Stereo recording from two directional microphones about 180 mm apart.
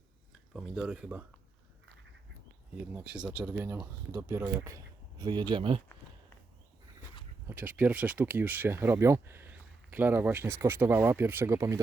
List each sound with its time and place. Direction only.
0.5 s speech: 5° right (ahead or behind)
2.9 s speech: 5° right (ahead or behind); by 5.8 s 30° right (ahead or behind)
7.4 s speech: 10° right (ahead or behind)